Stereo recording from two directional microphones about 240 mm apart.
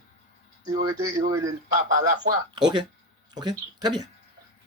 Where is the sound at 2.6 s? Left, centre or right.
Centre.